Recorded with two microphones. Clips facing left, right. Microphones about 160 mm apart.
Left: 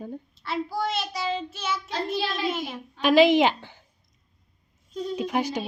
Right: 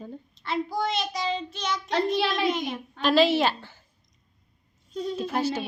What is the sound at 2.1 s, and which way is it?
Speech, 65° right (ahead or behind).